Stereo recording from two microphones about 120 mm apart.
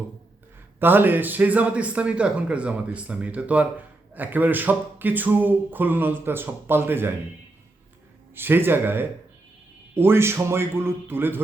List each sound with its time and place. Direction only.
0.8 s a man's voice: 15° right (ahead or behind)
8.4 s a man's voice: 15° right (ahead or behind)